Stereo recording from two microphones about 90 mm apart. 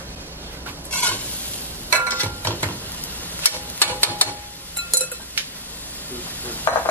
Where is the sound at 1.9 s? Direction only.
20° left (ahead or behind).